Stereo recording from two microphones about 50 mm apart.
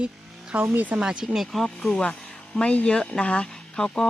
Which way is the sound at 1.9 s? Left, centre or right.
Centre.